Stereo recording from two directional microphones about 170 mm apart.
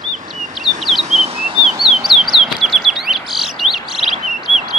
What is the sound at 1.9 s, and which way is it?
Bird, centre (ahead or behind).